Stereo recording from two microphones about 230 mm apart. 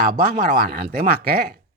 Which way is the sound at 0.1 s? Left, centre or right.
Right.